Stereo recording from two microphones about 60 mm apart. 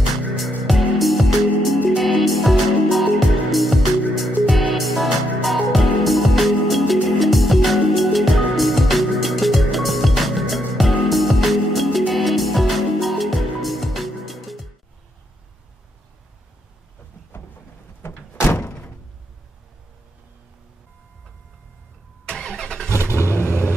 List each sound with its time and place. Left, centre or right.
0.4 s music: centre
18.0 s thunk: left
22.2 s vehicle: centre
23.1 s vehicle: left